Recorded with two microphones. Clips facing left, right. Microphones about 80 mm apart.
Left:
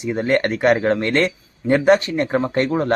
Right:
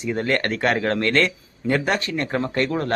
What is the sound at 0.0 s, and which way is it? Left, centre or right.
Speech, centre.